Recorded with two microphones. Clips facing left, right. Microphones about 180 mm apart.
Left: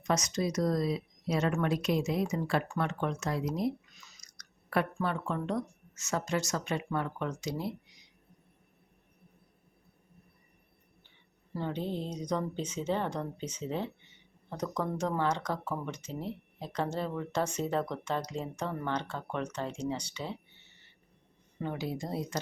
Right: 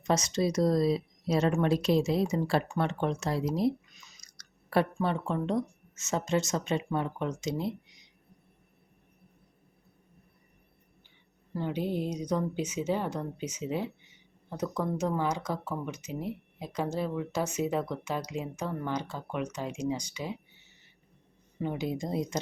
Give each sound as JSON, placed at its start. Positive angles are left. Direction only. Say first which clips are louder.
{"t": 0.0, "sound": "speech", "louder": "right 3 dB", "side_deg": -30}
{"t": 4.2, "sound": "chewing", "louder": "right 1 dB", "side_deg": -30}
{"t": 5.0, "sound": "speech", "louder": "right 3 dB", "side_deg": -20}
{"t": 11.5, "sound": "speech", "louder": "right 3 dB", "side_deg": -10}
{"t": 21.6, "sound": "speech", "louder": "right 3 dB", "side_deg": -20}